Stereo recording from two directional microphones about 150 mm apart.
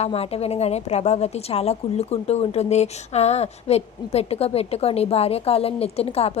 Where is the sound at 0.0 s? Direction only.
40° left (ahead or behind).